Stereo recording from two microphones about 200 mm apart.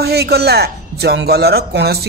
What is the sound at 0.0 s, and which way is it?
Speech, 55° right (ahead or behind).